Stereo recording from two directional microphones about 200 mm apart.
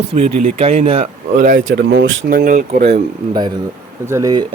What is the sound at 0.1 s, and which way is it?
Speech, 30° right (ahead or behind).